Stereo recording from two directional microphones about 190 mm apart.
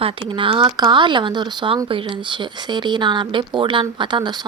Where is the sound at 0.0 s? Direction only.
25° right (ahead or behind).